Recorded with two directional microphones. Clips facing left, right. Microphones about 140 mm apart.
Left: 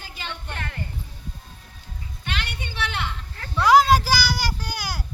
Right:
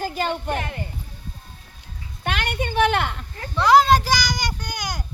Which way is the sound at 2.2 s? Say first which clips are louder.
Right 8 dB; 55° right (ahead or behind).